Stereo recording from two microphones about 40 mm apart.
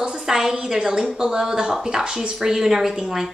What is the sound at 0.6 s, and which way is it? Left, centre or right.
Speech, centre.